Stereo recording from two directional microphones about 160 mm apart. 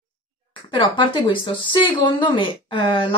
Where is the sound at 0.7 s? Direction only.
30° left (ahead or behind).